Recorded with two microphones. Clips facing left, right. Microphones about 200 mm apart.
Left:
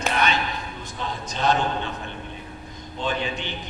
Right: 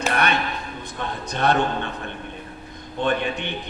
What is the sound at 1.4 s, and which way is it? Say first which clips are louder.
Speech: right 2 dB; 60° right (ahead or behind).